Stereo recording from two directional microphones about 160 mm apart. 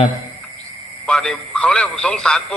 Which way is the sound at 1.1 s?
5° left (ahead or behind).